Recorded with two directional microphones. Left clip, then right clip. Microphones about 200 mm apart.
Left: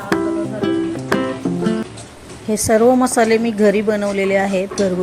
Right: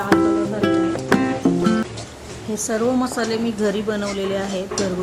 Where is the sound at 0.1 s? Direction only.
Centre (ahead or behind).